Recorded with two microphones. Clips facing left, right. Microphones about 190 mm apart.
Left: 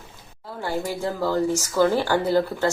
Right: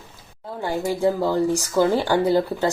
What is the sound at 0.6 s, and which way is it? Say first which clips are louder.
Speech: right 5 dB; 15° right (ahead or behind).